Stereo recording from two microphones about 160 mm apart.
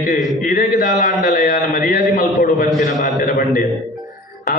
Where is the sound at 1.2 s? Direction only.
55° left (ahead or behind).